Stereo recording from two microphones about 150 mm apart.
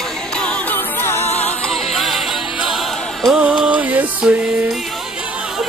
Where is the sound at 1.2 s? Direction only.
45° left (ahead or behind).